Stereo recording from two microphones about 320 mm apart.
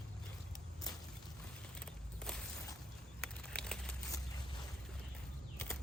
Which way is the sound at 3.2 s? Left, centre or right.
Centre.